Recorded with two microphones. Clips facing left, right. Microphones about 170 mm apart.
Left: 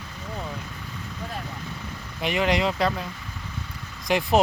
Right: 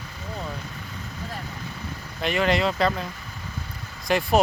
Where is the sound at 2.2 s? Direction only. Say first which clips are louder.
Right 1 dB; 15° left (ahead or behind).